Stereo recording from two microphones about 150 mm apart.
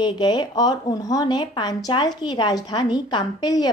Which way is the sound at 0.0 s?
30° left (ahead or behind).